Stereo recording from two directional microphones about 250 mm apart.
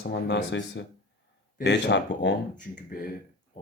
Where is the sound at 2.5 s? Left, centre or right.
Left.